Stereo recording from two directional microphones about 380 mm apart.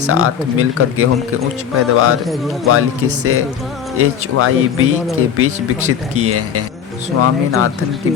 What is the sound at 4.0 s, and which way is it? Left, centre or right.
Speech, right.